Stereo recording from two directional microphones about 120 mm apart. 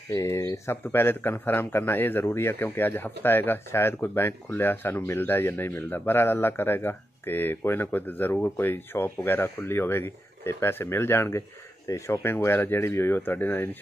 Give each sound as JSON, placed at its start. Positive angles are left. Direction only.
{"t": 0.1, "sound": "a man's voice", "side_deg": 25}